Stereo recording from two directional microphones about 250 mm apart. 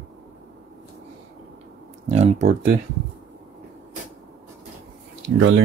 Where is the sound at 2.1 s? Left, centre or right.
Right.